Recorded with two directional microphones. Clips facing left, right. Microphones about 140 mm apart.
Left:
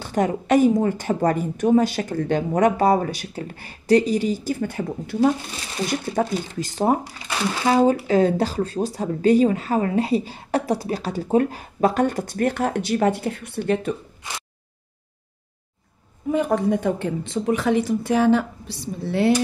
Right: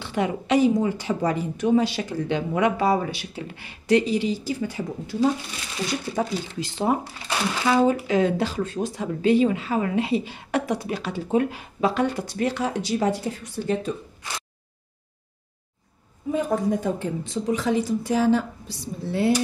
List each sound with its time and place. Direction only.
0.0 s a woman's voice: 45° left (ahead or behind); by 13.9 s 60° left (ahead or behind)
16.3 s a woman's voice: 70° left (ahead or behind)